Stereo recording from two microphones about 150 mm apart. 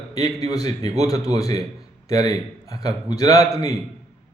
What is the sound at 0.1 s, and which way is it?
A man's voice, 25° left (ahead or behind).